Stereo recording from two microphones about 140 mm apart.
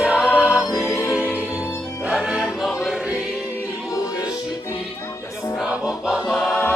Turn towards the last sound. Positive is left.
turn(degrees=5)  # may be behind; listen again after turning